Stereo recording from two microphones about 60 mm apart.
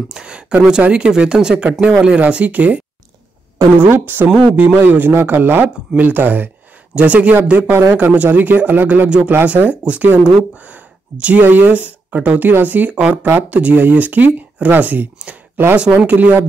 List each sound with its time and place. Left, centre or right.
0.1 s speech: centre
3.8 s speech: right
4.3 s speech: centre
4.7 s speech: right
10.7 s a sound: right
11.4 s speech: right